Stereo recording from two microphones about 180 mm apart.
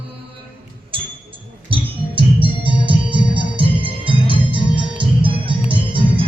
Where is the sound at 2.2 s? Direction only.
30° right (ahead or behind).